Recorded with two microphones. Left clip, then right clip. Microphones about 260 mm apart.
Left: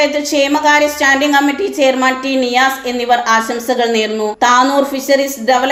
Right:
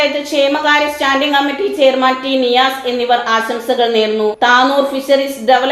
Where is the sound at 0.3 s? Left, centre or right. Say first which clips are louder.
Left 1 dB; left.